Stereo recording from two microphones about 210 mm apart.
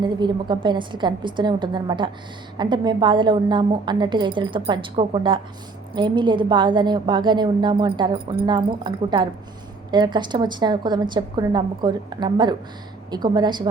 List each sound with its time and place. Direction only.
0.0 s a woman's voice: 20° right (ahead or behind)